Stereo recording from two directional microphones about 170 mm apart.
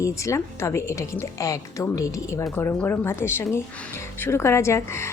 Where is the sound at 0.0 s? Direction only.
20° left (ahead or behind).